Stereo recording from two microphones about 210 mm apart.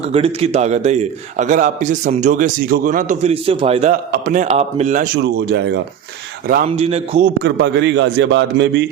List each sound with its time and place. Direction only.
0.0 s a man's voice: 30° right (ahead or behind)
4.1 s a man's voice: 40° right (ahead or behind)
5.2 s a man's voice: 55° right (ahead or behind)
6.7 s a man's voice: 30° right (ahead or behind)
7.3 s a man's voice: 55° right (ahead or behind)